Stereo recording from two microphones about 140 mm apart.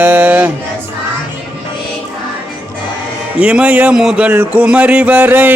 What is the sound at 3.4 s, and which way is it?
Music, 10° right (ahead or behind).